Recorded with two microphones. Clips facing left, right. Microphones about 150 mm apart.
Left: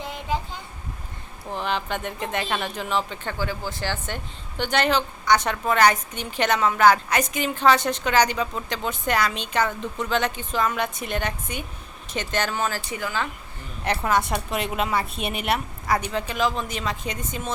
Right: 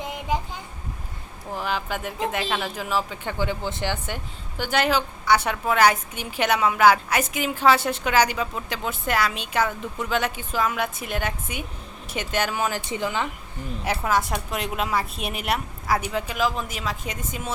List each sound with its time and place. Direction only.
0.0 s a sound: 15° right (ahead or behind)
1.5 s a woman's voice: 5° right (ahead or behind)
3.3 s a woman's voice: 20° right (ahead or behind)
12.9 s speech: 25° right (ahead or behind)
13.8 s a woman's voice: 5° right (ahead or behind)